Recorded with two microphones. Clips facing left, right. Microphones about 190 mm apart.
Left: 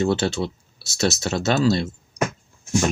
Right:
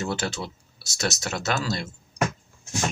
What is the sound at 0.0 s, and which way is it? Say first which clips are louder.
Speech: left 8 dB; 30° left (ahead or behind).